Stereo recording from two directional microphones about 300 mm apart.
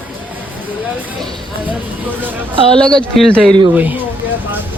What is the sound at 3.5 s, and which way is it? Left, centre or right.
Speech, centre.